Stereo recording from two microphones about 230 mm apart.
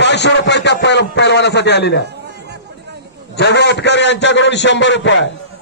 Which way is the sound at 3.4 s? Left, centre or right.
Left.